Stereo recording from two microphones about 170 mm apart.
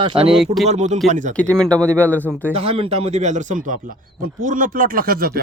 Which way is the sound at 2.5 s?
35° right (ahead or behind).